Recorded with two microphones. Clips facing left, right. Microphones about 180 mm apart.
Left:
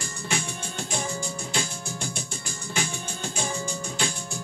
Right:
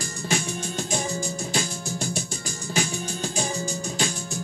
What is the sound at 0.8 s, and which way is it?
Music, 40° right (ahead or behind).